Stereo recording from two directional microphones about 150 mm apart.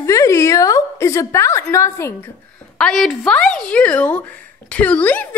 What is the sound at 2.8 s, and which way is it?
A woman's voice, centre (ahead or behind).